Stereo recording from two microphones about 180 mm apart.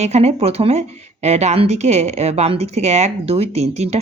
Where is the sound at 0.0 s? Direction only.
40° right (ahead or behind).